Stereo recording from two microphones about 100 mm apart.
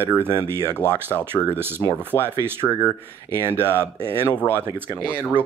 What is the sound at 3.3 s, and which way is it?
Speech, 25° right (ahead or behind).